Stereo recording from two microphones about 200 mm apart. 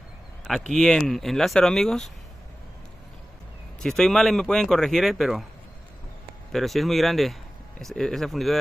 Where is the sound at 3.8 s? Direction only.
5° left (ahead or behind).